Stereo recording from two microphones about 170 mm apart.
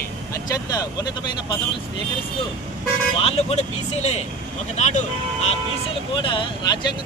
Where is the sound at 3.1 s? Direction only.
35° left (ahead or behind).